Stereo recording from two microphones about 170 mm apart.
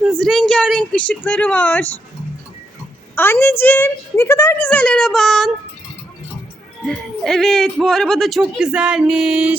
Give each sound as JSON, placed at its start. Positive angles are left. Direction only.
{"t": 0.0, "sound": "a woman's voice", "side_deg": 0}
{"t": 3.2, "sound": "a woman's voice", "side_deg": 15}
{"t": 6.8, "sound": "a man's voice", "side_deg": 0}